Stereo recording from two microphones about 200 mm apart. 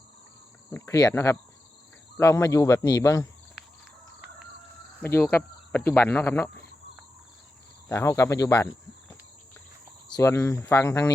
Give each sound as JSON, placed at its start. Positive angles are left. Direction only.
{"t": 0.7, "sound": "speech", "side_deg": 15}
{"t": 4.9, "sound": "speech", "side_deg": 10}
{"t": 7.9, "sound": "speech", "side_deg": 15}
{"t": 10.2, "sound": "speech", "side_deg": 15}